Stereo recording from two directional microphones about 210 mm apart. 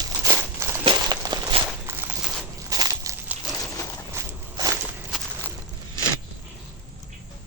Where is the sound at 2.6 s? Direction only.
15° right (ahead or behind).